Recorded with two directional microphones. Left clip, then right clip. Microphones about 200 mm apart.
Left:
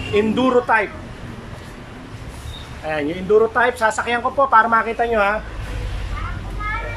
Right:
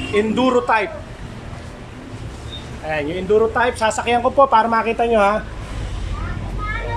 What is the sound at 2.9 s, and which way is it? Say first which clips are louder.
Speech: even; centre (ahead or behind).